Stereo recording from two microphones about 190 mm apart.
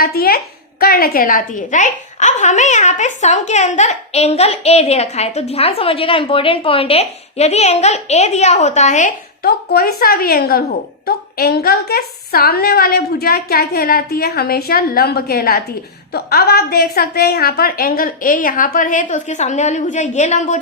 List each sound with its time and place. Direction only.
0.0 s a woman's voice: 50° left (ahead or behind)